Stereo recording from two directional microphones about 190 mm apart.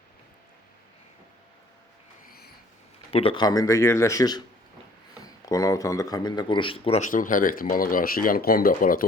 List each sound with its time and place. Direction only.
3.1 s speech: 30° left (ahead or behind); by 9.0 s 50° left (ahead or behind)